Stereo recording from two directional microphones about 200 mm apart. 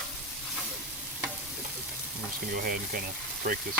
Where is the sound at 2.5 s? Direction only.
45° right (ahead or behind).